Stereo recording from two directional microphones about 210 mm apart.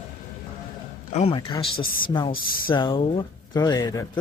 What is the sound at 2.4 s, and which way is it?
Speech, 45° left (ahead or behind).